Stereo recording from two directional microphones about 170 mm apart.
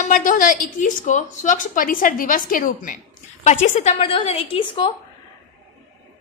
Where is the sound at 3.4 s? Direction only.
40° left (ahead or behind).